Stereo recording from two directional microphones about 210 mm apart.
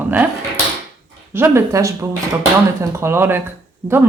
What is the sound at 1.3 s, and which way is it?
Speech, 10° right (ahead or behind).